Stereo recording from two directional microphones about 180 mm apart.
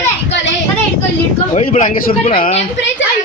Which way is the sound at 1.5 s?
40° left (ahead or behind).